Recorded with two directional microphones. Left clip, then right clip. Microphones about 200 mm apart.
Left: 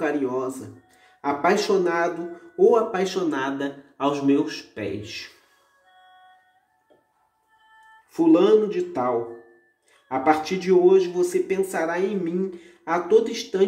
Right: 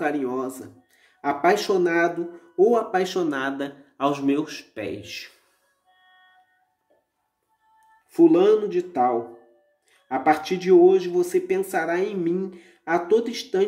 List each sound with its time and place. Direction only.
0.0 s speech: 50° right (ahead or behind)
8.1 s speech: 50° right (ahead or behind)